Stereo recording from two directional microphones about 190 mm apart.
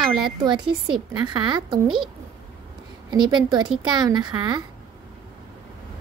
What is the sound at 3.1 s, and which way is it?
Speech, 20° right (ahead or behind).